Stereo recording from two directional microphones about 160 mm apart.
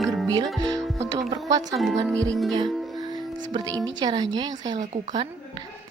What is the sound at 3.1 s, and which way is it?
A woman's voice, 25° right (ahead or behind).